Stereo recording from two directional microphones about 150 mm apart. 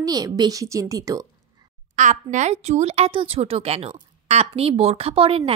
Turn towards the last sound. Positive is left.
turn(degrees=-35)  # may be behind; listen again after turning